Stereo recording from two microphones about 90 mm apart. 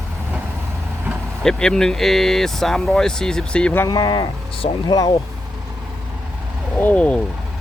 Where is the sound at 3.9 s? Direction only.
50° left (ahead or behind).